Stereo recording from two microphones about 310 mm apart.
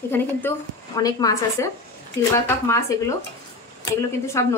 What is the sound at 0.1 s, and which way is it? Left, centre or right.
Speech, centre.